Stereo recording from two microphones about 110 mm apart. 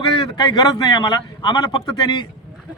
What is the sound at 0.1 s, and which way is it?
Speech, 45° left (ahead or behind).